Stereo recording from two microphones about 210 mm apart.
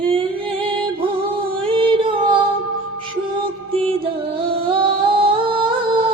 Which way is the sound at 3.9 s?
25° right (ahead or behind).